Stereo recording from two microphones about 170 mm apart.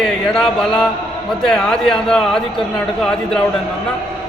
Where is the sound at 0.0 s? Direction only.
5° left (ahead or behind).